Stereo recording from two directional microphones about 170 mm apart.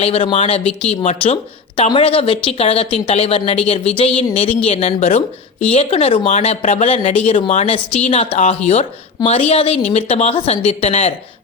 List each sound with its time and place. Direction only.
0.0 s speech: 35° left (ahead or behind)